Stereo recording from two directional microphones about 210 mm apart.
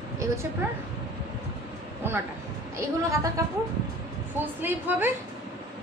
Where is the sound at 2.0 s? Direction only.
10° right (ahead or behind).